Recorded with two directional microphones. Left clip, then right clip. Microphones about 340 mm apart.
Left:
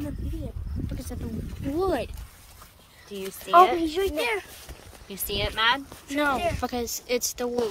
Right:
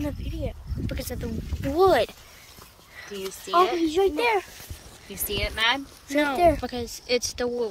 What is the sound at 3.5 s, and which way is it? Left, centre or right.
Speech, centre.